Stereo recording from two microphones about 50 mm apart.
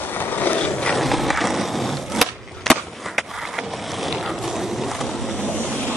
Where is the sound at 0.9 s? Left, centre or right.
Centre.